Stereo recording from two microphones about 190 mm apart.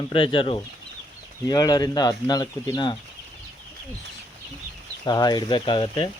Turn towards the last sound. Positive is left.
turn(degrees=25)  # may be behind; listen again after turning